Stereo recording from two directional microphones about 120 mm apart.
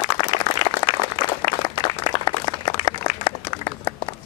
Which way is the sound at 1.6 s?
40° left (ahead or behind).